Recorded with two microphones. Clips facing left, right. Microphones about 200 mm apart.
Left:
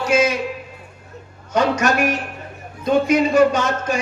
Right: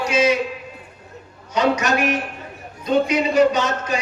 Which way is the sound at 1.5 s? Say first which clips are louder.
Left 1 dB; 50° left (ahead or behind).